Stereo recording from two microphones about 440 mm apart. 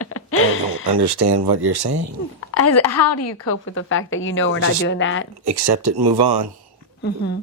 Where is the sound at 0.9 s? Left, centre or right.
Right.